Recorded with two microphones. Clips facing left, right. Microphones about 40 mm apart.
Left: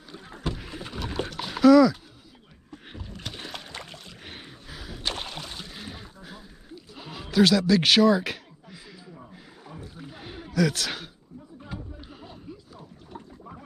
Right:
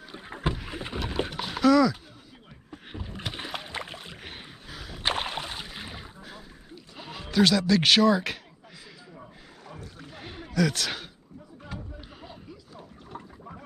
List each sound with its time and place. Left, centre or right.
0.1 s boat: right
0.7 s rowboat: right
0.9 s pig: centre
2.7 s rowboat: centre
4.2 s rowboat: centre
5.0 s rowboat: right
6.2 s a sound: centre